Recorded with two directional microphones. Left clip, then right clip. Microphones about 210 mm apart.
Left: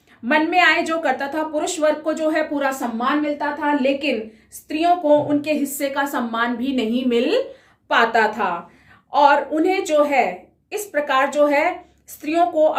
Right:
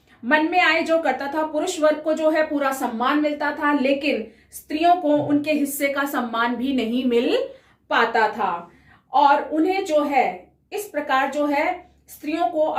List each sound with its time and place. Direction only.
0.3 s a woman's voice: 30° left (ahead or behind)
7.9 s a woman's voice: 30° left (ahead or behind)